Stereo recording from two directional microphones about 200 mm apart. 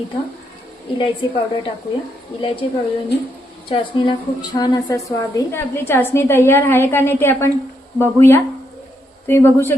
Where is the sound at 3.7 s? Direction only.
25° left (ahead or behind).